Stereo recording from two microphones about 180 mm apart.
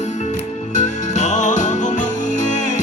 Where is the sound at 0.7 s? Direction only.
40° left (ahead or behind).